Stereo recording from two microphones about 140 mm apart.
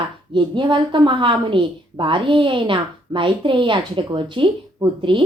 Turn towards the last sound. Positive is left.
turn(degrees=-35)  # may be behind; listen again after turning